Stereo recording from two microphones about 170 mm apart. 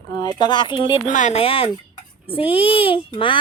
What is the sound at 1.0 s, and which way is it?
A child's voice, 45° left (ahead or behind).